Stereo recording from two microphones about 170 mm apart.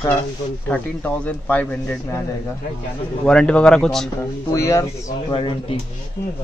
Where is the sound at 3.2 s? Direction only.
5° left (ahead or behind).